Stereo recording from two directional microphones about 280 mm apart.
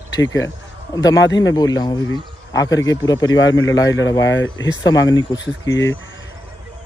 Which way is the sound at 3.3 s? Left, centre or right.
Left.